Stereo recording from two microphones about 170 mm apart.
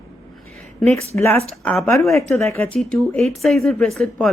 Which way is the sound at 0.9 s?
40° right (ahead or behind).